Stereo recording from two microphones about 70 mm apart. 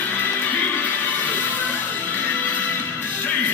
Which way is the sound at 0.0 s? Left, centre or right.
Left.